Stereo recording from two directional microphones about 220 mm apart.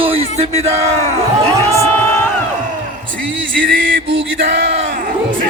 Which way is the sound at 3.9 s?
55° right (ahead or behind).